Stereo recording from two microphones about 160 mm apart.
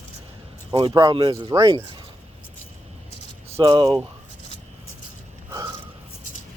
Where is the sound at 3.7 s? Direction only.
30° right (ahead or behind).